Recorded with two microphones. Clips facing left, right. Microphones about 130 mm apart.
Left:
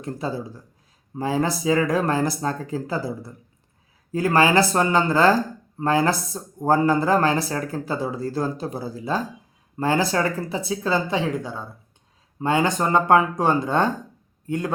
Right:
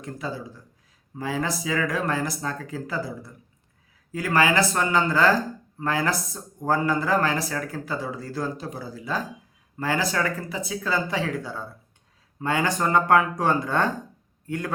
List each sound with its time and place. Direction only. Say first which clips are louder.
0.0 s a man's voice: left 4 dB; 30° left (ahead or behind)